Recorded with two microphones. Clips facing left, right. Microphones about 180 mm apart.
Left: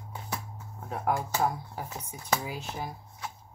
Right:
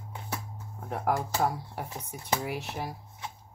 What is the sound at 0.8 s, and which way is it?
Speech, 65° right (ahead or behind).